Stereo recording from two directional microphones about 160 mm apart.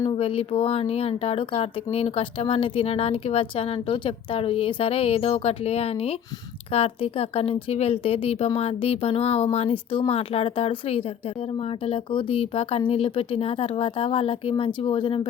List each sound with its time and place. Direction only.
0.0 s speech: 35° left (ahead or behind)